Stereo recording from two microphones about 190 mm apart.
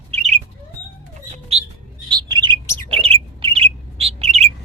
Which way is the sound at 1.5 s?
35° right (ahead or behind).